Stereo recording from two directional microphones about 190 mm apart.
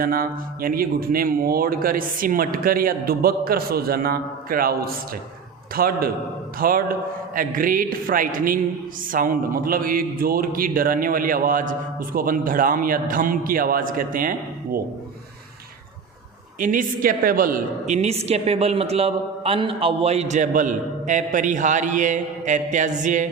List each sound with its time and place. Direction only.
0.0 s speech: 50° right (ahead or behind)
16.6 s a woman's voice: 45° right (ahead or behind)